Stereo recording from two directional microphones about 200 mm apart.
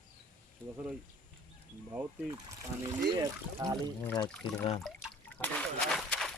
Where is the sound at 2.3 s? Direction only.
15° right (ahead or behind).